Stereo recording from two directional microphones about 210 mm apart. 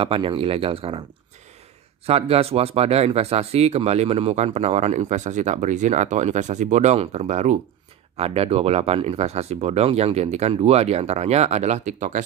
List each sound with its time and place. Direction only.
0.0 s speech: 25° right (ahead or behind)
2.0 s speech: 30° right (ahead or behind)